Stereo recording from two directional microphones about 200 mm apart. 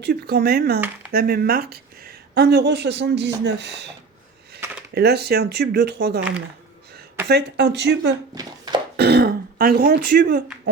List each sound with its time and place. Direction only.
0.0 s a woman's voice: 55° right (ahead or behind)
4.9 s a woman's voice: 55° right (ahead or behind)
7.3 s a woman's voice: 55° right (ahead or behind)
8.4 s a sound: 20° right (ahead or behind)
9.0 s speech: 55° right (ahead or behind)